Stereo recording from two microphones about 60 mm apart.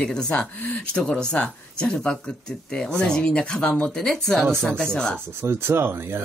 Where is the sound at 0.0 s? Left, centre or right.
Centre.